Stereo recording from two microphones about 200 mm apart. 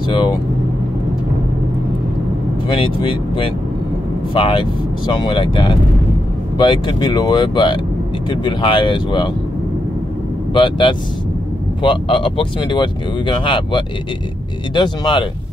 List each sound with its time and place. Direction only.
0.1 s vehicle: 25° left (ahead or behind)
2.8 s speech: 25° left (ahead or behind)
10.5 s speech: 25° left (ahead or behind)